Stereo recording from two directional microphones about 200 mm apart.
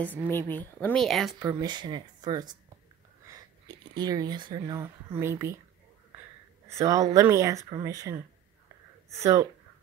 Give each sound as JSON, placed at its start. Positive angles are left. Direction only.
{"t": 0.0, "sound": "a woman's voice", "side_deg": 10}
{"t": 1.5, "sound": "speech", "side_deg": -20}
{"t": 6.7, "sound": "speech", "side_deg": -15}